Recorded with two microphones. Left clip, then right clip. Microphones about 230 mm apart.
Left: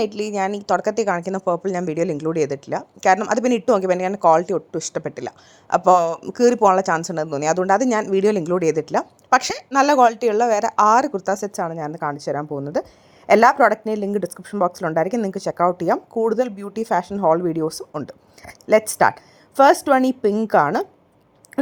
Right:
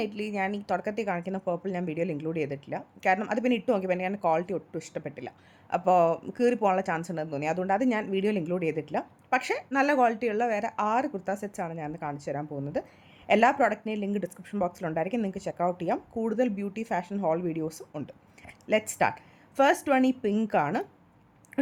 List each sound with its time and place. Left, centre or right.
0.0 s a woman's voice: centre
18.6 s a woman's voice: centre